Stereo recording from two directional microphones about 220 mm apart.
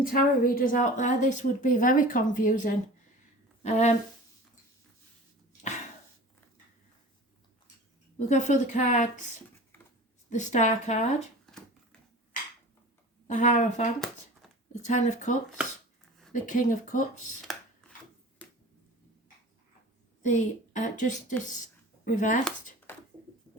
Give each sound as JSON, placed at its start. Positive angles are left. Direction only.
{"t": 0.0, "sound": "speech", "side_deg": 40}
{"t": 8.3, "sound": "speech", "side_deg": 35}
{"t": 10.2, "sound": "speech", "side_deg": 35}
{"t": 13.2, "sound": "speech", "side_deg": 35}
{"t": 18.4, "sound": "finger snapping", "side_deg": 5}
{"t": 20.2, "sound": "speech", "side_deg": 35}